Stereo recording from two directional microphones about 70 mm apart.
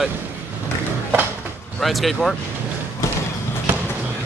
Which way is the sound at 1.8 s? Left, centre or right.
Centre.